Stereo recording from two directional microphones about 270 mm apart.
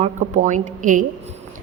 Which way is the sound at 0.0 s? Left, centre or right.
Right.